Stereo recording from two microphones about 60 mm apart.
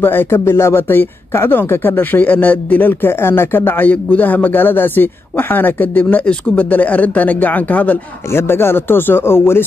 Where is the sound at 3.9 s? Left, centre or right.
Left.